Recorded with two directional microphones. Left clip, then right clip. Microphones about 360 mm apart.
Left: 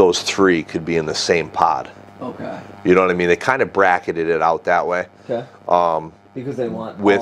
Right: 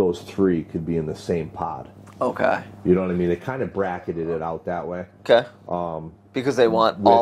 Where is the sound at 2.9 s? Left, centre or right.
Centre.